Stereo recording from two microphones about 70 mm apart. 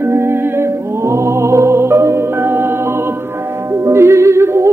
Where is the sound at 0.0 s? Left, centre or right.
Right.